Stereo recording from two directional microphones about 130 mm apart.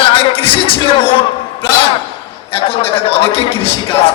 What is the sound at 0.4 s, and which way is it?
Music, 45° left (ahead or behind).